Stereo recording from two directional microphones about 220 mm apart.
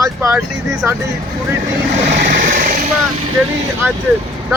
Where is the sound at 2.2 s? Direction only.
40° right (ahead or behind).